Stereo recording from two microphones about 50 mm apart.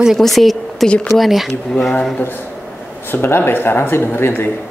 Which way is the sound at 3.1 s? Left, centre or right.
Left.